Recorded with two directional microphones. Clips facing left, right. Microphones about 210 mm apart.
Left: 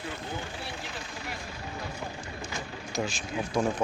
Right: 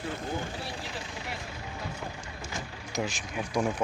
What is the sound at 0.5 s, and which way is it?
Speech, 35° right (ahead or behind).